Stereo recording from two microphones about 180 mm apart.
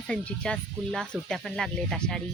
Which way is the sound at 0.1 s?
5° left (ahead or behind).